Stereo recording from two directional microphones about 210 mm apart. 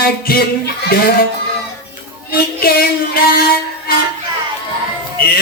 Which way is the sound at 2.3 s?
45° left (ahead or behind).